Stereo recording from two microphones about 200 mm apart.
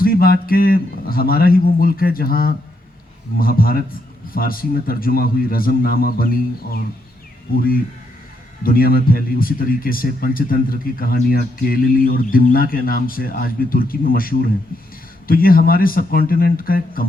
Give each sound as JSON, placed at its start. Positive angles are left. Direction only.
{"t": 0.0, "sound": "speech", "side_deg": 50}